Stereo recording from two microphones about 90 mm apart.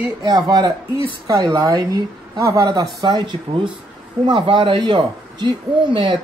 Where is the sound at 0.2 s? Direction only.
50° right (ahead or behind).